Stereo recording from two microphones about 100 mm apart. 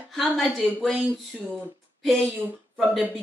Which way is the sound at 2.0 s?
Centre (ahead or behind).